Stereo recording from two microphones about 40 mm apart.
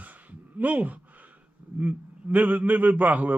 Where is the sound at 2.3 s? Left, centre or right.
Right.